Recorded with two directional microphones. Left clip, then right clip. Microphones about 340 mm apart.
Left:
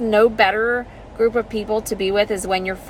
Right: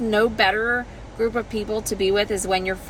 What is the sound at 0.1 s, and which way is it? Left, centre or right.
Speech, centre.